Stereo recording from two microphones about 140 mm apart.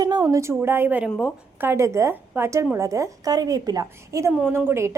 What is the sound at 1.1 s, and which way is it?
Speech, 10° left (ahead or behind).